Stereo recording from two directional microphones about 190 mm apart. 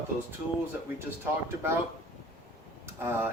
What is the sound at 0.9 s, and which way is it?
Speech, 10° right (ahead or behind).